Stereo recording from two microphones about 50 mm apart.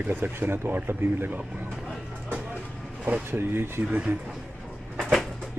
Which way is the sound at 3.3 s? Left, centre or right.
Right.